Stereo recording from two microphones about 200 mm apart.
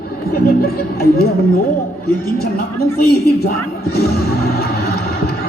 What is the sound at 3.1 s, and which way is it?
Music, 50° left (ahead or behind).